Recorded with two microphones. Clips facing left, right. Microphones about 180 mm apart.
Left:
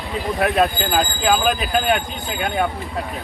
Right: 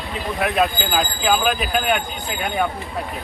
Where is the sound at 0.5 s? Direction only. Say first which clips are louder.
Left 2 dB; centre (ahead or behind).